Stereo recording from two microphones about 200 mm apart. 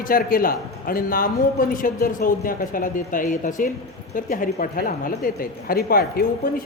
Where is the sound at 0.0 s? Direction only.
45° left (ahead or behind).